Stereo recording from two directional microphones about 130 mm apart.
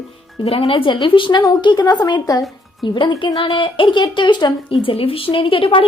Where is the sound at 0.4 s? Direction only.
45° left (ahead or behind).